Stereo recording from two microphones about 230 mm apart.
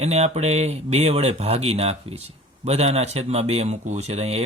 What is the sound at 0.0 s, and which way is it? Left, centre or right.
Speech, right.